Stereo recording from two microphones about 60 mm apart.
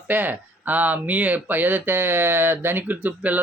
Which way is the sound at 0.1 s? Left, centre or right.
Right.